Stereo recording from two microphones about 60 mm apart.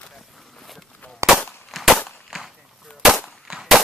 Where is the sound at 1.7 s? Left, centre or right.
Centre.